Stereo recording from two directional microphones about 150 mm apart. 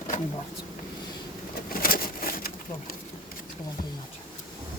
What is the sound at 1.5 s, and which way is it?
Pigeon, 75° left (ahead or behind).